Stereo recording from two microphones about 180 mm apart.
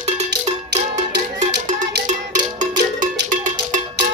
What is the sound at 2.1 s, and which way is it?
Cowbell, 45° right (ahead or behind).